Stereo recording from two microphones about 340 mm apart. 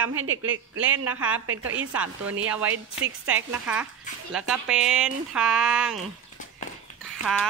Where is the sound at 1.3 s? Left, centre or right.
Right.